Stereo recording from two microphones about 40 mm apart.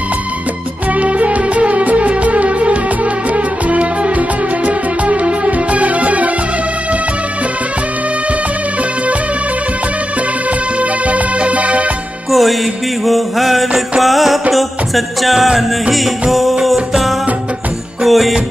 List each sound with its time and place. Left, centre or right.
0.9 s music: right
10.8 s music: right
12.3 s music: centre